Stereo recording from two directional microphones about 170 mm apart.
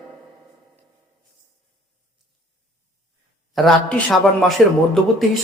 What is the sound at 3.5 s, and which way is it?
A man's voice, 5° left (ahead or behind).